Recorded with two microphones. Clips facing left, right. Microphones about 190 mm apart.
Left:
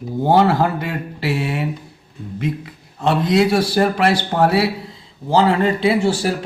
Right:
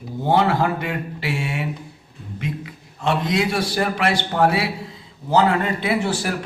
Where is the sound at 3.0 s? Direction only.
35° left (ahead or behind).